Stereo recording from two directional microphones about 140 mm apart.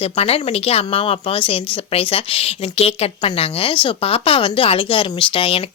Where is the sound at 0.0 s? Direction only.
45° left (ahead or behind).